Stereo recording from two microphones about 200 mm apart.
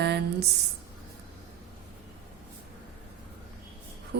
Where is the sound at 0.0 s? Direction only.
55° right (ahead or behind).